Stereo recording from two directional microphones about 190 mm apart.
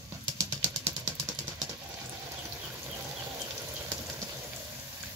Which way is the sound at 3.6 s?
15° right (ahead or behind).